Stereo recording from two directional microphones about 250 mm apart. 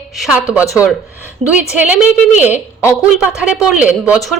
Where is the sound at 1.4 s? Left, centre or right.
Right.